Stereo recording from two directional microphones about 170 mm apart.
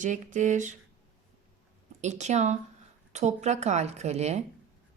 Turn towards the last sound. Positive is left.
turn(degrees=-40)  # may be behind; listen again after turning